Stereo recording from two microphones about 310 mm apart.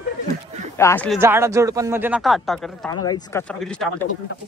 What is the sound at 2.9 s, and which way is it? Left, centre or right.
Speech, centre.